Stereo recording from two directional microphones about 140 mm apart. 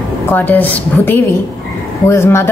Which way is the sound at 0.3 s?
15° left (ahead or behind).